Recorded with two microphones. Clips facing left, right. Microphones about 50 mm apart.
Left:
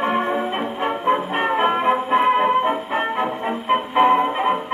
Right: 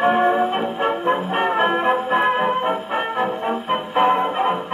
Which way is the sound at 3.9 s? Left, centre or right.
Centre.